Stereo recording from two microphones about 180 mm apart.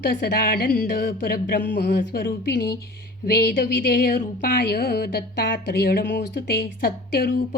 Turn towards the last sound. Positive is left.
turn(degrees=55)  # may be behind; listen again after turning